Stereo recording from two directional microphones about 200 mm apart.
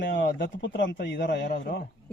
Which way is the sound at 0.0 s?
60° left (ahead or behind).